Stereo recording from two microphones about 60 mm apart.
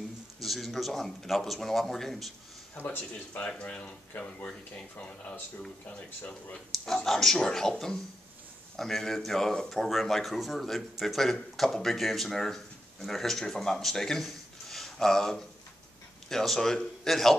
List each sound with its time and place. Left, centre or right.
0.4 s a man's voice: centre
2.7 s speech: left
6.9 s a man's voice: centre